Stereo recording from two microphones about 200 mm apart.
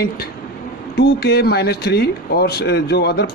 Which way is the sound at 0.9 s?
55° left (ahead or behind).